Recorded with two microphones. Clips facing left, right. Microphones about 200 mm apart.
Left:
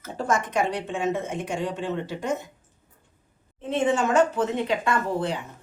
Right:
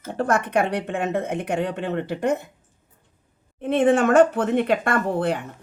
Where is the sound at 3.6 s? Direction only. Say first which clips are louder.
Right 5 dB; 55° right (ahead or behind).